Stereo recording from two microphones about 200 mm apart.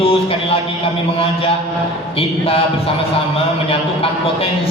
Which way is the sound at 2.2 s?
30° left (ahead or behind).